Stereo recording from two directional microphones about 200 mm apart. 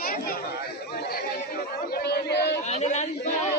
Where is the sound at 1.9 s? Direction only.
55° left (ahead or behind).